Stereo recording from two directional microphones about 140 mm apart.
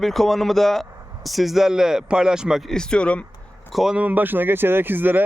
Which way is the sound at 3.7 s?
5° right (ahead or behind).